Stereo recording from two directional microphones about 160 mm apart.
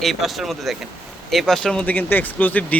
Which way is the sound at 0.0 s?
Centre (ahead or behind).